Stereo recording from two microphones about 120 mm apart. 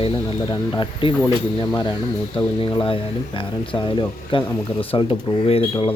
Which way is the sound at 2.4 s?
45° left (ahead or behind).